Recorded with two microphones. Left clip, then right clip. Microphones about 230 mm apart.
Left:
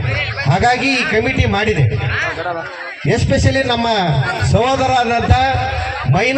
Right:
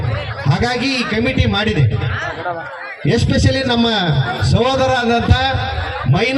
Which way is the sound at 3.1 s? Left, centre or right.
Right.